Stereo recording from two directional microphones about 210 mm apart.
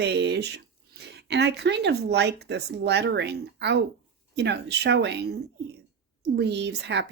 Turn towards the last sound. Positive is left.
turn(degrees=-55)  # may be behind; listen again after turning